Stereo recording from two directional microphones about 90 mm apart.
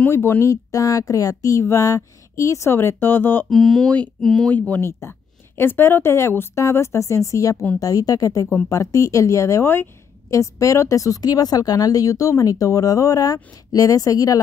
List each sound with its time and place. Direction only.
0.0 s speech: 25° left (ahead or behind)
3.4 s speech: centre (ahead or behind)
4.5 s speech: 20° left (ahead or behind); by 14.4 s 40° left (ahead or behind)